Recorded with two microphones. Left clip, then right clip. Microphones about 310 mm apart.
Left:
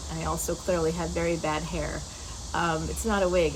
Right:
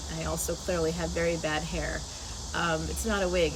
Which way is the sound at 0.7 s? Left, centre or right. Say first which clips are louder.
Left 3 dB; centre.